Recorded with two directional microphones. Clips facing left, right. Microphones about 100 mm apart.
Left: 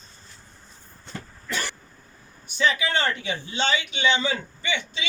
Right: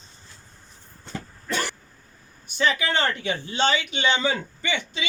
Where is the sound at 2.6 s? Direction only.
50° right (ahead or behind).